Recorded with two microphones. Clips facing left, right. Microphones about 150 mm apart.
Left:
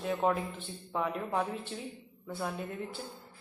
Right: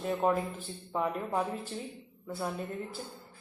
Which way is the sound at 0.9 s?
5° right (ahead or behind).